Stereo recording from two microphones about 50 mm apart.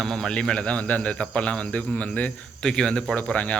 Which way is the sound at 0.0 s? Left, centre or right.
Centre.